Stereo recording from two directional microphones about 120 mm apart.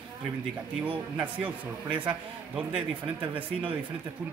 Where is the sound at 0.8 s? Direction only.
15° right (ahead or behind).